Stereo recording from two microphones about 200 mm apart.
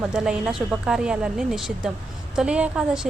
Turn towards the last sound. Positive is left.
turn(degrees=-5)  # may be behind; listen again after turning